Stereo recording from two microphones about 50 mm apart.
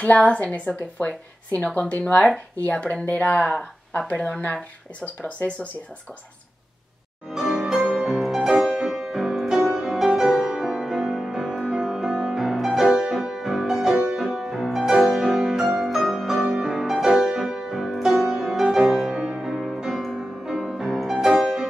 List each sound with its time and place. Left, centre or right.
0.0 s a woman's voice: left
2.7 s a woman's voice: left
7.3 s music: centre
12.4 s music: centre
12.8 s music: centre
14.2 s music: centre
16.7 s music: centre
19.1 s music: centre
19.4 s music: centre